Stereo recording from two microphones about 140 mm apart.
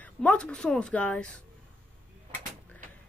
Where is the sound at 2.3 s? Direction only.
65° right (ahead or behind).